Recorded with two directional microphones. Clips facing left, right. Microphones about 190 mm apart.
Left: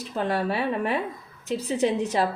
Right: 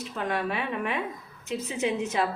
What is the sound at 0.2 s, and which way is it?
A woman's voice, 35° left (ahead or behind).